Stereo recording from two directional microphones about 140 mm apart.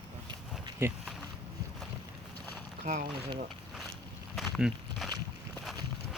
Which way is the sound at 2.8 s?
70° right (ahead or behind).